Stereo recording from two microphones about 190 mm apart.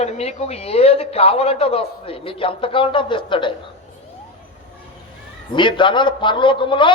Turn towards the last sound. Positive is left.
turn(degrees=25)  # may be behind; listen again after turning